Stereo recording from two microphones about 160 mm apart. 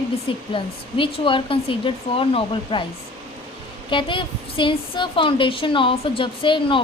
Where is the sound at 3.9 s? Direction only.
30° left (ahead or behind).